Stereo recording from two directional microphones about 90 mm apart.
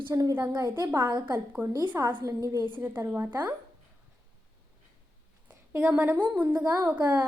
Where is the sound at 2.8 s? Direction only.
25° right (ahead or behind).